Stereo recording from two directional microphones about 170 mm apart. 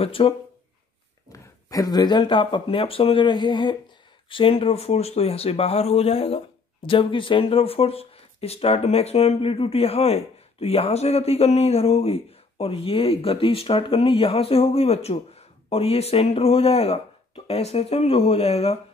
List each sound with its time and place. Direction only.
0.0 s speech: 35° left (ahead or behind)
1.3 s speech: 20° left (ahead or behind); by 18.8 s 40° left (ahead or behind)